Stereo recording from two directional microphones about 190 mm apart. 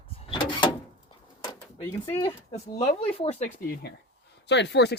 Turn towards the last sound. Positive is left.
turn(degrees=65)  # may be behind; listen again after turning